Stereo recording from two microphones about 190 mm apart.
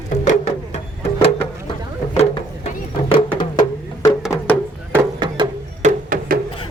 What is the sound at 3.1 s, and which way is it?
Music, 25° left (ahead or behind).